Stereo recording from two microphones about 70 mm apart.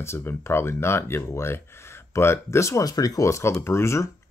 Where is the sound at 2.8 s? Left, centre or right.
Left.